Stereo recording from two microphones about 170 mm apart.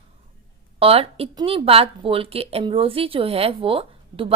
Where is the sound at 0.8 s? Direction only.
35° right (ahead or behind).